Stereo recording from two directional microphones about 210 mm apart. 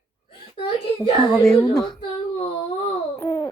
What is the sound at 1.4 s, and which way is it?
Speech, centre (ahead or behind).